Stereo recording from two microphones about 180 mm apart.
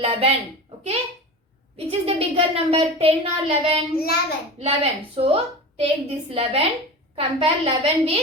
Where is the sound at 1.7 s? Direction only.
30° right (ahead or behind).